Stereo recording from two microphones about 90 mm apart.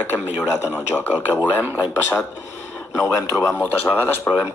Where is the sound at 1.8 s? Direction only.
30° left (ahead or behind).